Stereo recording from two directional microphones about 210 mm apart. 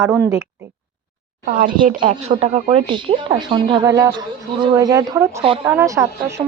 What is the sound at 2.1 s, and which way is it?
Speech, 30° right (ahead or behind).